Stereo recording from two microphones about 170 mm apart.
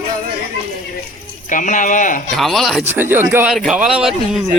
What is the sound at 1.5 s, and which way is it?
Speech, 50° left (ahead or behind).